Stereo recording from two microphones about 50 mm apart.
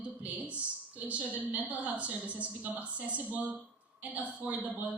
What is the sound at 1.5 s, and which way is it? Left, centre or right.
A woman's voice, right.